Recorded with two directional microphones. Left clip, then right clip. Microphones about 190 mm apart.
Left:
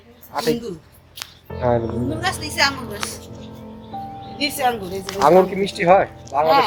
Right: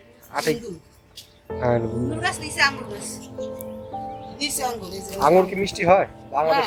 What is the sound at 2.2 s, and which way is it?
Speech, 60° left (ahead or behind).